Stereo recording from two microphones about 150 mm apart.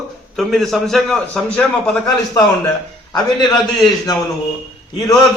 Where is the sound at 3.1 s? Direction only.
30° left (ahead or behind).